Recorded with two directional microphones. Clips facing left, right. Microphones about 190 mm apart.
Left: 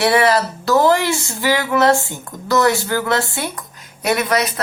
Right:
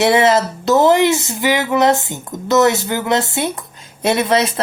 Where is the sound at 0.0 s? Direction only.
20° right (ahead or behind).